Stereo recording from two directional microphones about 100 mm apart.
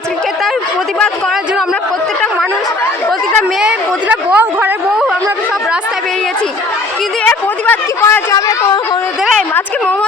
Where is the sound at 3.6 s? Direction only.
10° right (ahead or behind).